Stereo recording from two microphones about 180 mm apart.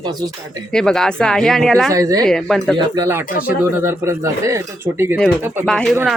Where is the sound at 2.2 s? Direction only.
5° left (ahead or behind).